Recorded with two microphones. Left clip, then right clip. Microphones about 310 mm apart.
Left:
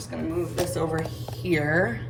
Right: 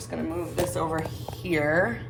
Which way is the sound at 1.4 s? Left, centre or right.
Right.